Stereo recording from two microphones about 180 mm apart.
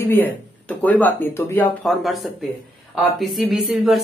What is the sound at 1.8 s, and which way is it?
Speech, centre (ahead or behind).